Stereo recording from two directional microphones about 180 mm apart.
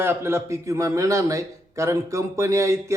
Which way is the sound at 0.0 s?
15° right (ahead or behind).